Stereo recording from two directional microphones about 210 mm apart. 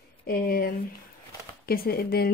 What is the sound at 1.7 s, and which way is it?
Speech, 45° left (ahead or behind).